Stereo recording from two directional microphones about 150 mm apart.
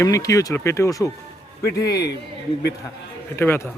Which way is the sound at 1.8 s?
90° left.